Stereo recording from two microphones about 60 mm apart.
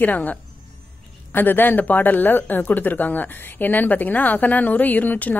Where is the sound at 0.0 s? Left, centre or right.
Left.